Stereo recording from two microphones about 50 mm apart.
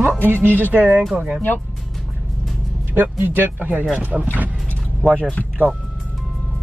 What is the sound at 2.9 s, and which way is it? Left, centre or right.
Speech, right.